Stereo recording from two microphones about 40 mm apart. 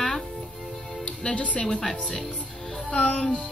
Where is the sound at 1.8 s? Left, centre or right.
Centre.